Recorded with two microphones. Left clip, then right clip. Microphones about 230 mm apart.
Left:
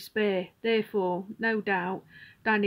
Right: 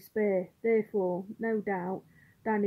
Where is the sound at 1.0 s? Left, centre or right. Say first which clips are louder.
Left 2 dB; left.